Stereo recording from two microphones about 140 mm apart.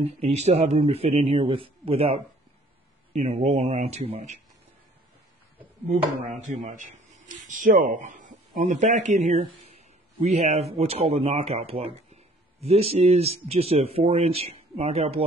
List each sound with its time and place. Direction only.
0.0 s a man's voice: 45° right (ahead or behind)
6.4 s a man's voice: 65° right (ahead or behind); by 15.2 s 45° right (ahead or behind)